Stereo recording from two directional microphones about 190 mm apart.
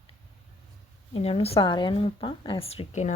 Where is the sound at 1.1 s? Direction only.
30° left (ahead or behind).